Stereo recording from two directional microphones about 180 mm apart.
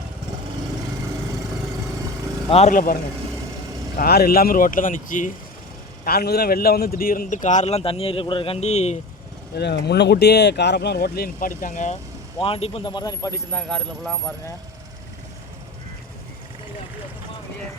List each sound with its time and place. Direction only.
2.5 s a man's voice: 40° left (ahead or behind)
6.1 s a man's voice: 60° left (ahead or behind); by 9.0 s 40° left (ahead or behind)
9.6 s speech: 65° left (ahead or behind); by 11.9 s 45° left (ahead or behind)
12.4 s speech: 30° left (ahead or behind)
13.5 s speech: 5° left (ahead or behind)